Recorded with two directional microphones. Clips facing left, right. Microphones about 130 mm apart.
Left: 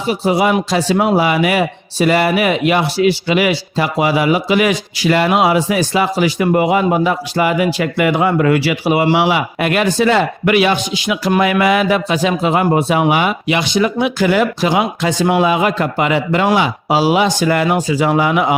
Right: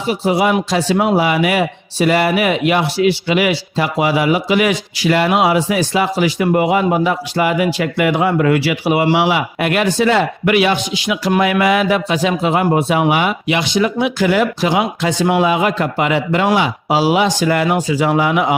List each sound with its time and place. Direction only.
0.1 s speech: 35° left (ahead or behind)